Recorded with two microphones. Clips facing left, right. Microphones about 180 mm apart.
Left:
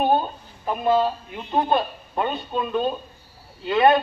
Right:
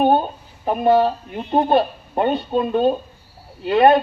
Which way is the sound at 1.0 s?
45° right (ahead or behind).